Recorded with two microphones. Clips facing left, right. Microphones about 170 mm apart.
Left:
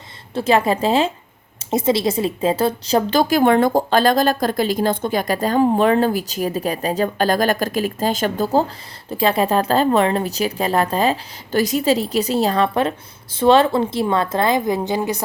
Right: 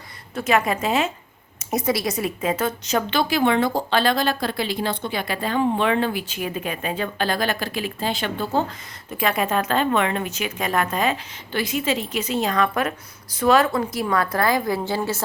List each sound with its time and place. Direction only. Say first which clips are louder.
0.3 s a woman's voice: left 4 dB; 30° left (ahead or behind)
9.0 s a woman's voice: left 5 dB; 30° left (ahead or behind)